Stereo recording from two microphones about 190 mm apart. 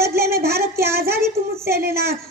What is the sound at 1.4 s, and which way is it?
Speech, 50° right (ahead or behind).